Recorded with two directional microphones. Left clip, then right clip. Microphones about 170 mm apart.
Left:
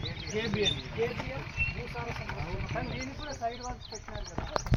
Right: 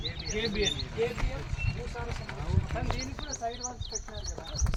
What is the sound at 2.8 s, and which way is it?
Speech, 5° right (ahead or behind).